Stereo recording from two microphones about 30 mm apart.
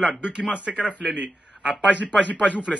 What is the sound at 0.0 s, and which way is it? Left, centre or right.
A man's voice, right.